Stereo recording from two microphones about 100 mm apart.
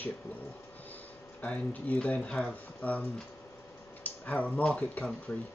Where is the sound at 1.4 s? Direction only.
15° left (ahead or behind).